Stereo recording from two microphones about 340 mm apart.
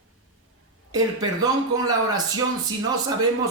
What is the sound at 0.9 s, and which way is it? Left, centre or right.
Speech, centre.